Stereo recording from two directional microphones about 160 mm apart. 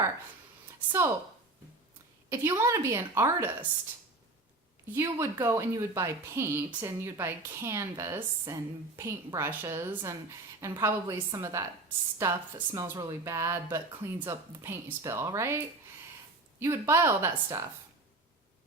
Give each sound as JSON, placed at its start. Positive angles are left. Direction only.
{"t": 0.9, "sound": "a woman's voice", "side_deg": -15}
{"t": 2.3, "sound": "speech", "side_deg": -15}
{"t": 4.9, "sound": "a woman's voice", "side_deg": -15}